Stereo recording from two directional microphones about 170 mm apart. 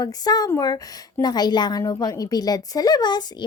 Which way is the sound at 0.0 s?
20° left (ahead or behind).